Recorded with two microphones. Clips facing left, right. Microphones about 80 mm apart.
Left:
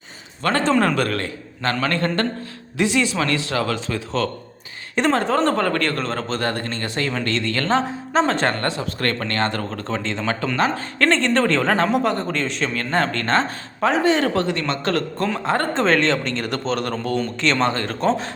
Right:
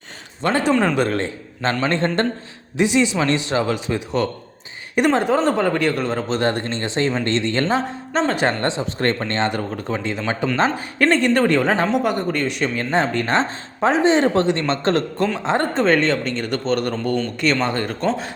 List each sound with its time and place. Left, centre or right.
0.4 s speech: centre
7.7 s speech: centre
8.4 s speech: right
15.7 s speech: centre